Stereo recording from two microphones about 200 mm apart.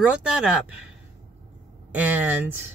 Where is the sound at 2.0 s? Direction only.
10° right (ahead or behind).